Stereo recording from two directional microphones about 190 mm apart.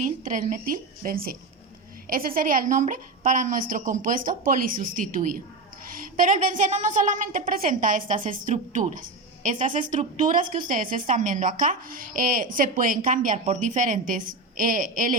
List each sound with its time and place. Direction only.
0.0 s a woman's voice: 40° right (ahead or behind)